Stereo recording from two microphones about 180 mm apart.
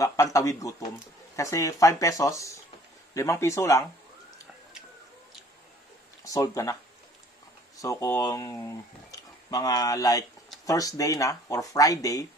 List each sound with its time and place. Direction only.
0.0 s speech: 15° left (ahead or behind)
6.2 s speech: 20° left (ahead or behind)